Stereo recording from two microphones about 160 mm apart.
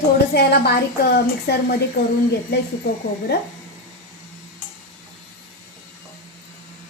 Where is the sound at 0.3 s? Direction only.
90° left.